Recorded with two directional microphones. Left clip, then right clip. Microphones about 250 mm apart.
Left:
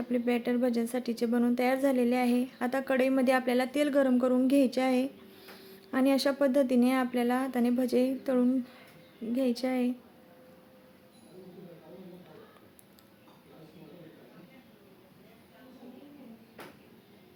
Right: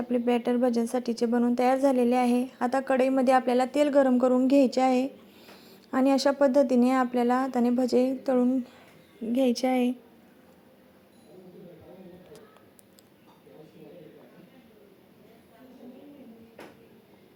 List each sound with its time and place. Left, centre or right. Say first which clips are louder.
0.1 s speech: right 4 dB; centre